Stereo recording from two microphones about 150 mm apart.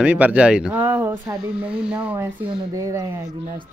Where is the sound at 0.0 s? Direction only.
10° right (ahead or behind).